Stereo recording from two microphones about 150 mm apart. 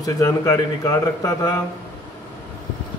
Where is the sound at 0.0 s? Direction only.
20° left (ahead or behind).